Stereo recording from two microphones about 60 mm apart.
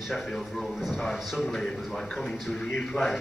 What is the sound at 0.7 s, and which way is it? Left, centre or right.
Speech, centre.